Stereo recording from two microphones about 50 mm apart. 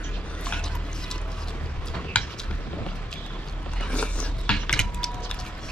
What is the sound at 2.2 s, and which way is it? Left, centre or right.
Tick-tock, left.